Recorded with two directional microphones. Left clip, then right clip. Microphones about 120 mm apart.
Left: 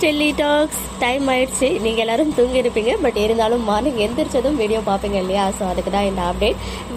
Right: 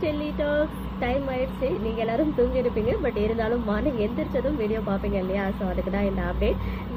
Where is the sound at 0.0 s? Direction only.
70° left (ahead or behind).